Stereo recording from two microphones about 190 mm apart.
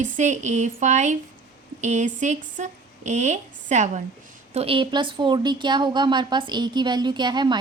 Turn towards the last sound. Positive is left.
turn(degrees=-25)  # may be behind; listen again after turning